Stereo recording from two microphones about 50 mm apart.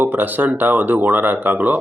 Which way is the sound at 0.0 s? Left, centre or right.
Right.